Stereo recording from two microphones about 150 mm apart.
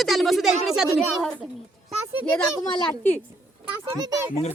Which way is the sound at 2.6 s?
15° left (ahead or behind).